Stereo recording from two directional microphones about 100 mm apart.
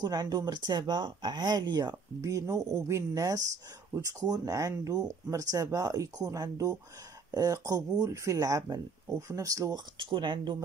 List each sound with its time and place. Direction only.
0.0 s speech: 40° right (ahead or behind)
9.9 s speech: 50° right (ahead or behind)